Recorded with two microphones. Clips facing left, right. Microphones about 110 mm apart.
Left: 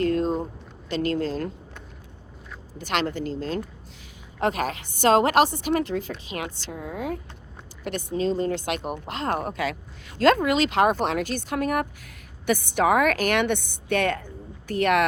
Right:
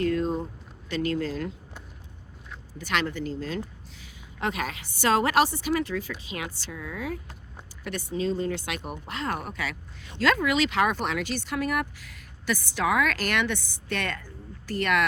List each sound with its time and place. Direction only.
0.0 s a sound: 40° left (ahead or behind)
0.9 s speech: 40° left (ahead or behind)
2.8 s speech: 45° left (ahead or behind)